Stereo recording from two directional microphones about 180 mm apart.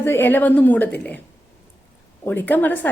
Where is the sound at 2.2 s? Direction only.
10° left (ahead or behind).